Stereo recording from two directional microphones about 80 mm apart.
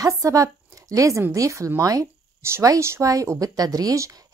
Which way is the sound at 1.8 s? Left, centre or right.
Right.